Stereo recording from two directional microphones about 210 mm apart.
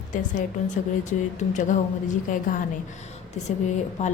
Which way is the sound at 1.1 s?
35° left (ahead or behind).